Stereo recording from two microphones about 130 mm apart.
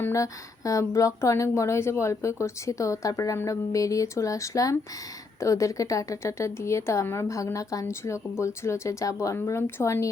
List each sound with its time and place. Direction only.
0.0 s a woman's voice: 25° left (ahead or behind)